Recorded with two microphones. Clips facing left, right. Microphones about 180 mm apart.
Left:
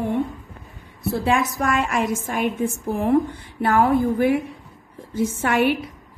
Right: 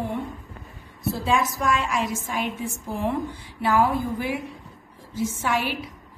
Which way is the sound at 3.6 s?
55° left (ahead or behind).